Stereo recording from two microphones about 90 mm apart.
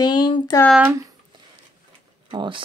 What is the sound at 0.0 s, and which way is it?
Speech, 50° left (ahead or behind).